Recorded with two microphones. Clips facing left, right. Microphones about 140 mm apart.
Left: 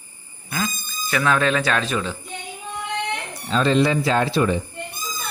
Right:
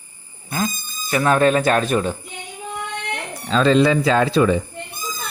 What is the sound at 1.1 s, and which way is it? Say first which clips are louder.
Speech: right 4 dB; 40° right (ahead or behind).